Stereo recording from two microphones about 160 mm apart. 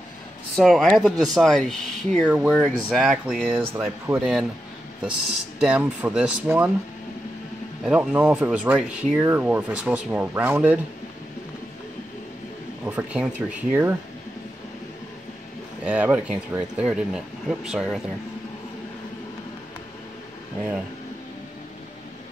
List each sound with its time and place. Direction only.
0.6 s speech: centre (ahead or behind)
3.7 s speech: 15° right (ahead or behind)
4.2 s speech: 5° right (ahead or behind)
5.6 s speech: 10° right (ahead or behind)
7.8 s speech: 5° right (ahead or behind)
12.8 s speech: 5° right (ahead or behind)
15.8 s speech: 10° right (ahead or behind)